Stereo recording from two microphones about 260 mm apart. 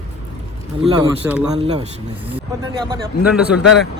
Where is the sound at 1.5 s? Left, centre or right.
Right.